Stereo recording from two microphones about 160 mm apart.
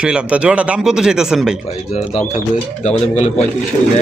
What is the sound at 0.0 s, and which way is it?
Speech, 5° right (ahead or behind).